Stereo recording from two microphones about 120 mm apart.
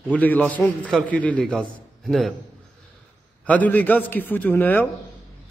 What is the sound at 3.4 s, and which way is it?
A man's voice, 15° left (ahead or behind).